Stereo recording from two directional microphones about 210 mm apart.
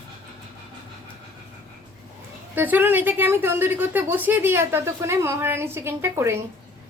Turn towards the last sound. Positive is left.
turn(degrees=-10)  # may be behind; listen again after turning